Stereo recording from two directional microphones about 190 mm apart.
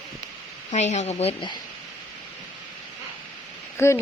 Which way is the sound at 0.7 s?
40° left (ahead or behind).